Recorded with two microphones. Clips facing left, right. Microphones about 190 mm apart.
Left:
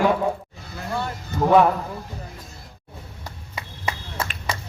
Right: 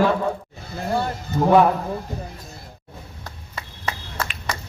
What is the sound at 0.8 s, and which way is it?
Speech, 35° right (ahead or behind).